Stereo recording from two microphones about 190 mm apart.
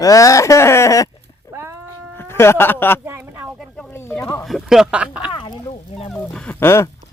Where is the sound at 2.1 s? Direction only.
10° left (ahead or behind).